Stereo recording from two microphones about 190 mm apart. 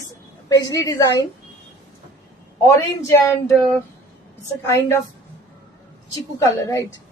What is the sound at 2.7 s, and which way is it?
Speech, 15° left (ahead or behind).